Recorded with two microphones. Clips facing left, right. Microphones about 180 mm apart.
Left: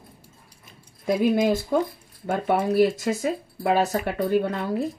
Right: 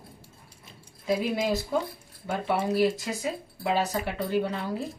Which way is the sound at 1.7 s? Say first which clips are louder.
Left 5 dB; 55° left (ahead or behind).